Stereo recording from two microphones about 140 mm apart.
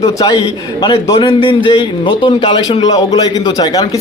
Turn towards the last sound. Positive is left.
turn(degrees=30)  # may be behind; listen again after turning